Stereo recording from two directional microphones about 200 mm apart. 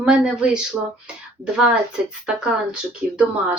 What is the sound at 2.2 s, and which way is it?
A woman's voice, 5° right (ahead or behind).